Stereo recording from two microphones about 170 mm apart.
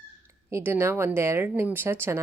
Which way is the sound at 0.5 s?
15° right (ahead or behind).